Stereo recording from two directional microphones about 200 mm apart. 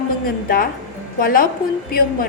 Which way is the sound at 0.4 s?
45° left (ahead or behind).